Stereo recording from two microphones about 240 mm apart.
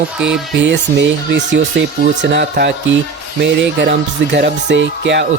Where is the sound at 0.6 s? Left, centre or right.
Right.